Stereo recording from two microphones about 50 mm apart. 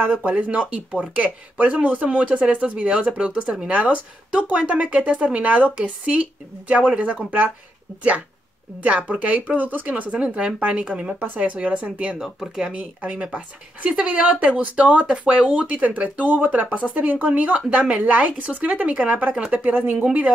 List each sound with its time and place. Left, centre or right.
0.1 s speech: right
8.8 s speech: right
10.1 s speech: centre
11.1 s speech: right
12.2 s speech: centre
12.7 s speech: right